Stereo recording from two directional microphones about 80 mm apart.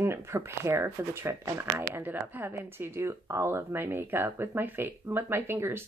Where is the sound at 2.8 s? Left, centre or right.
Right.